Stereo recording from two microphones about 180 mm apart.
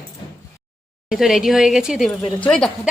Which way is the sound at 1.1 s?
Centre (ahead or behind).